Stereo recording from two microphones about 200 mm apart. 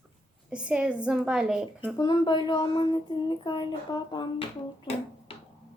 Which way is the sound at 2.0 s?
20° left (ahead or behind).